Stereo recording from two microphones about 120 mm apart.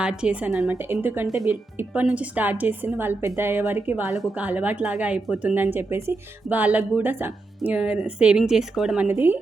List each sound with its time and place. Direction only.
0.0 s speech: 5° right (ahead or behind)
9.0 s speech: 15° right (ahead or behind)